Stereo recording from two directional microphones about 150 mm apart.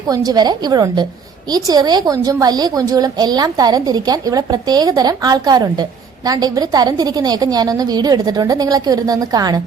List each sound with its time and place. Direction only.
0.1 s a woman's voice: 25° right (ahead or behind)